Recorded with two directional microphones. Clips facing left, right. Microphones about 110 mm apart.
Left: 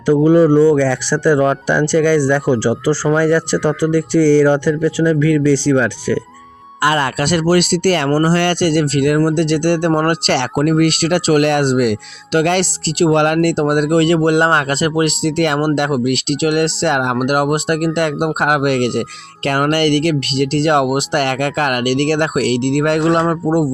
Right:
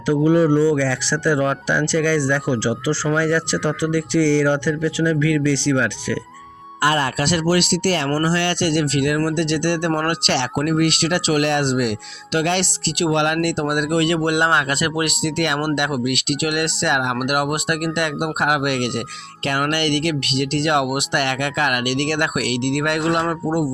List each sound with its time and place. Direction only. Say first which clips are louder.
0.1 s speech: left 5 dB; 45° left (ahead or behind)
6.8 s speech: left 3 dB; 70° left (ahead or behind)
7.3 s speech: left 6 dB; 50° left (ahead or behind); by 23.6 s 35° left (ahead or behind)